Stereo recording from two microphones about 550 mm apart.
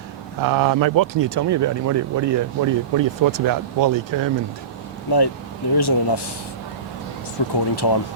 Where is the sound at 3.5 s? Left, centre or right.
Right.